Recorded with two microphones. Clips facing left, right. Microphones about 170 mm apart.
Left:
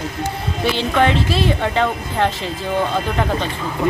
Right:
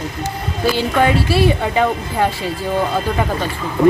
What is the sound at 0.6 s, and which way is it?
A woman's voice, 10° right (ahead or behind).